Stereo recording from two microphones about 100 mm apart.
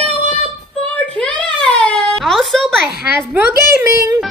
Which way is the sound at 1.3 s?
50° right (ahead or behind).